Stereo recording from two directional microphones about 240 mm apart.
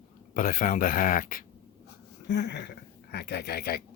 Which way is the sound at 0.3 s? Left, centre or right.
Left.